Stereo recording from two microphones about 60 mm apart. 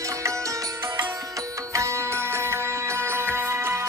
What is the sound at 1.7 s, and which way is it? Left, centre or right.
Music, right.